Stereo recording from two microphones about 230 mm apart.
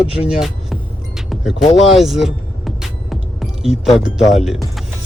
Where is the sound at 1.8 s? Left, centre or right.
Centre.